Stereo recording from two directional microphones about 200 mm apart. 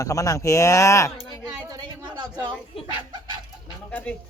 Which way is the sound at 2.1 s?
20° right (ahead or behind).